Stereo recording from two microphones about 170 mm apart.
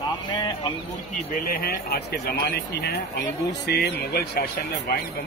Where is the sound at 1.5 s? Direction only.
60° left (ahead or behind).